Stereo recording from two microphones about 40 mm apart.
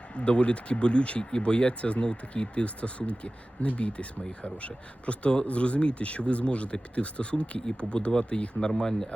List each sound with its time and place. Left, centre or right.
0.1 s speech: left
8.8 s speech: centre